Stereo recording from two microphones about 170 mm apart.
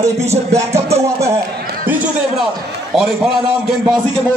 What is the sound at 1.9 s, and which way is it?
A man's voice, 10° right (ahead or behind).